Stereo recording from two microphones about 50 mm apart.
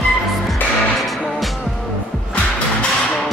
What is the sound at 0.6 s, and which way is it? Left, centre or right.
Music, left.